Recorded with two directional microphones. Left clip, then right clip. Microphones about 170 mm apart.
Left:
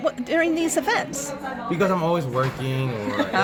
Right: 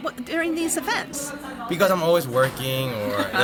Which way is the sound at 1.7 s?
90° right.